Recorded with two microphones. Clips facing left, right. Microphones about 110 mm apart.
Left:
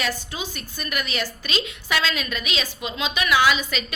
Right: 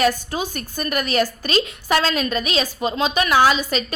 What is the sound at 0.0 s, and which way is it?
A woman's voice, 45° right (ahead or behind).